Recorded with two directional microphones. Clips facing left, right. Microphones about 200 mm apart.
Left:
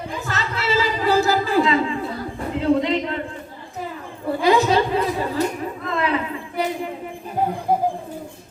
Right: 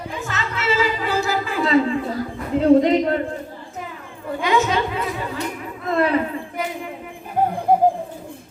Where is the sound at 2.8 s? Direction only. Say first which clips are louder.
Right 5 dB; 45° right (ahead or behind).